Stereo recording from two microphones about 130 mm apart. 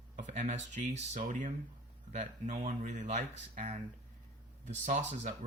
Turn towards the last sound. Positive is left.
turn(degrees=-65)  # may be behind; listen again after turning